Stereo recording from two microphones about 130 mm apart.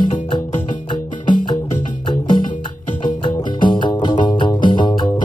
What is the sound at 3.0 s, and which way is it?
Music, 35° left (ahead or behind).